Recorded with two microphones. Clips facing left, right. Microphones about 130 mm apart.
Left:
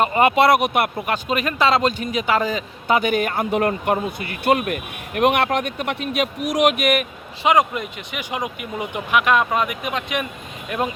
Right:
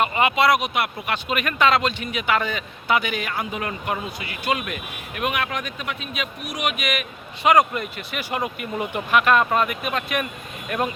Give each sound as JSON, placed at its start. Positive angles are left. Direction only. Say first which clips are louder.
{"t": 0.0, "sound": "speech", "louder": "left 4 dB", "side_deg": 35}
{"t": 0.3, "sound": "speech", "louder": "left 4 dB", "side_deg": 55}
{"t": 0.9, "sound": "speech", "louder": "left 3 dB", "side_deg": 35}
{"t": 4.7, "sound": "speech", "louder": "left 6 dB", "side_deg": 65}
{"t": 7.4, "sound": "speech", "louder": "even", "side_deg": 20}